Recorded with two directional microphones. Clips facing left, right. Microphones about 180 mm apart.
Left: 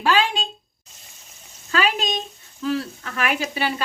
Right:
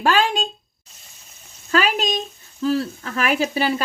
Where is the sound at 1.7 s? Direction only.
40° right (ahead or behind).